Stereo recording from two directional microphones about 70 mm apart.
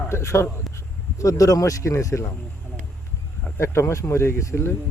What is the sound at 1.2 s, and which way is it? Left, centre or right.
Speech, left.